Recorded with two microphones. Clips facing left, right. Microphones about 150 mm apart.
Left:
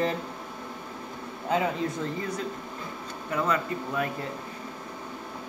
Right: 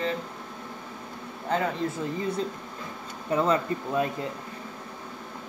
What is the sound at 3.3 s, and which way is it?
Speech, 30° right (ahead or behind).